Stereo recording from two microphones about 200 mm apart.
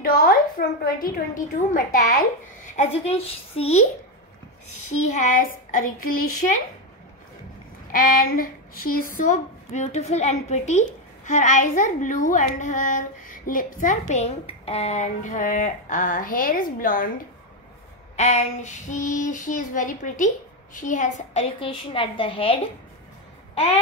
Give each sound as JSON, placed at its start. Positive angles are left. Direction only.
{"t": 0.0, "sound": "a woman's voice", "side_deg": 40}
{"t": 2.7, "sound": "a child's voice", "side_deg": 30}
{"t": 5.0, "sound": "a child's voice", "side_deg": 40}
{"t": 7.9, "sound": "a child's voice", "side_deg": 45}
{"t": 18.1, "sound": "a child's voice", "side_deg": 35}